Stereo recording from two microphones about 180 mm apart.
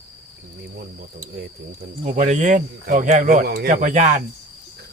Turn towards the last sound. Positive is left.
turn(degrees=-45)  # may be behind; listen again after turning